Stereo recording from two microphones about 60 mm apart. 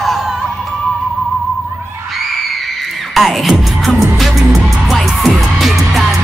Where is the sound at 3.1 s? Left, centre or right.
Centre.